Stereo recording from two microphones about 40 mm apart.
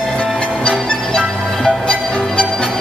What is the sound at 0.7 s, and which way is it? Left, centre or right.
Music, left.